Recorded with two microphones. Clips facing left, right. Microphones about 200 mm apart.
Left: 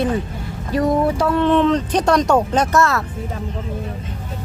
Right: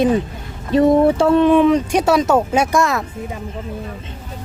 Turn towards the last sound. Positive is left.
turn(degrees=-15)  # may be behind; listen again after turning